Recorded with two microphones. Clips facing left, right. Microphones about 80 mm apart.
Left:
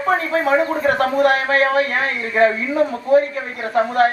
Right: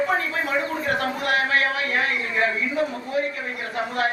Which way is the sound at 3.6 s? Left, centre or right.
Left.